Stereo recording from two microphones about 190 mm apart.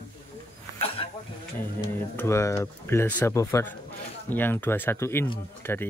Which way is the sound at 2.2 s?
15° left (ahead or behind).